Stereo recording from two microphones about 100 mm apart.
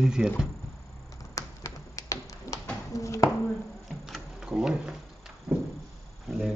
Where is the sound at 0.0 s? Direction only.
5° right (ahead or behind).